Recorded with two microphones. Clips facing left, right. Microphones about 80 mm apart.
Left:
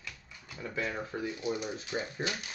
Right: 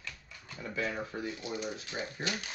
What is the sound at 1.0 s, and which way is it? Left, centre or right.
Speech, left.